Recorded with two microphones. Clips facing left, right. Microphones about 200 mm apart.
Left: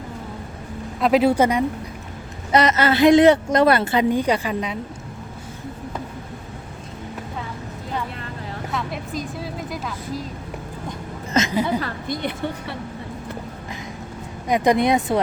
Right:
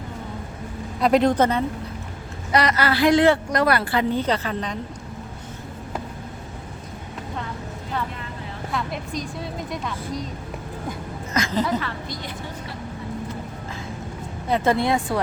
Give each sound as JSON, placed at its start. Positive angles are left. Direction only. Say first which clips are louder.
{"t": 0.9, "sound": "speech", "louder": "left 1 dB", "side_deg": 0}
{"t": 2.5, "sound": "a woman's voice", "louder": "left 3 dB", "side_deg": 20}
{"t": 4.1, "sound": "speech", "louder": "left 3 dB", "side_deg": 15}
{"t": 8.7, "sound": "a woman's voice", "louder": "even", "side_deg": 0}
{"t": 11.3, "sound": "a sound", "louder": "left 4 dB", "side_deg": 25}
{"t": 11.8, "sound": "a woman's voice", "louder": "left 5 dB", "side_deg": 50}
{"t": 14.4, "sound": "speech", "louder": "left 3 dB", "side_deg": 15}